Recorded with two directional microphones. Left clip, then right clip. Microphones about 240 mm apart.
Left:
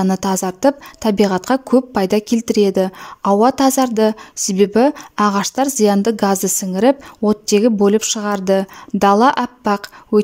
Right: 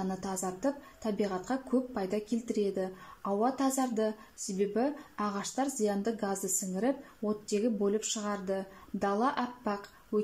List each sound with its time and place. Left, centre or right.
0.0 s speech: left